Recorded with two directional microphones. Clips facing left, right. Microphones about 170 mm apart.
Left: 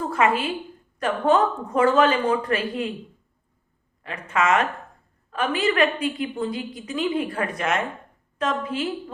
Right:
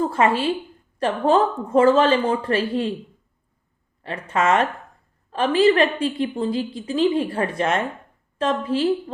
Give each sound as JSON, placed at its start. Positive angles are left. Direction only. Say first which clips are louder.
{"t": 0.1, "sound": "a woman's voice", "louder": "right 2 dB", "side_deg": -30}
{"t": 4.0, "sound": "a woman's voice", "louder": "right 2 dB", "side_deg": -30}